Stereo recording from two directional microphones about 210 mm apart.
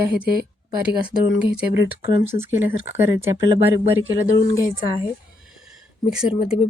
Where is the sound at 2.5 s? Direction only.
10° right (ahead or behind).